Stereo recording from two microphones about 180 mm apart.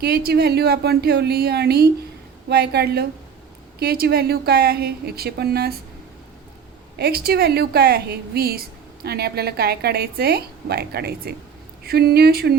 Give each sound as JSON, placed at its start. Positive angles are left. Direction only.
{"t": 0.0, "sound": "a woman's voice", "side_deg": -60}
{"t": 7.0, "sound": "a woman's voice", "side_deg": -60}